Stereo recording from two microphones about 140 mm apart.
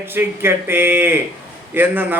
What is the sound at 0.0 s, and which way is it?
A man's voice, 15° right (ahead or behind).